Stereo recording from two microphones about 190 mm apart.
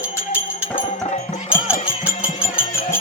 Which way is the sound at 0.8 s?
35° left (ahead or behind).